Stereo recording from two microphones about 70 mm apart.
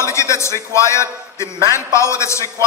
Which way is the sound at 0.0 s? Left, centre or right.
Left.